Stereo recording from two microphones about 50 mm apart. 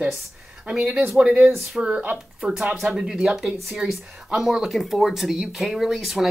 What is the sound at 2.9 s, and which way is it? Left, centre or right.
Speech, centre.